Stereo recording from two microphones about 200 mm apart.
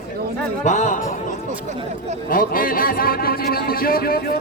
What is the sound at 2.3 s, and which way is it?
A man's voice, 45° left (ahead or behind).